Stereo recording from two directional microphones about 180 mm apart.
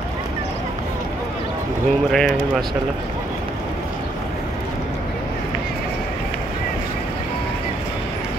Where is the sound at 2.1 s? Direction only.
Centre (ahead or behind).